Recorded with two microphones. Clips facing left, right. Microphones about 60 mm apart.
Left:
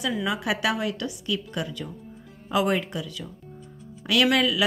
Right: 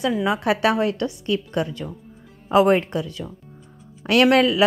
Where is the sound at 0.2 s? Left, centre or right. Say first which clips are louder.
Right 6 dB; right.